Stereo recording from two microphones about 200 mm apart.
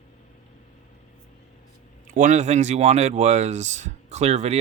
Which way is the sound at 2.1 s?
40° right (ahead or behind).